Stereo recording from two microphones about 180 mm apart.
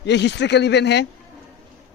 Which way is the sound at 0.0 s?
75° left (ahead or behind).